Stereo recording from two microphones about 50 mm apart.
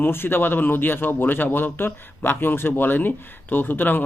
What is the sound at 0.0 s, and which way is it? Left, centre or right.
Speech, left.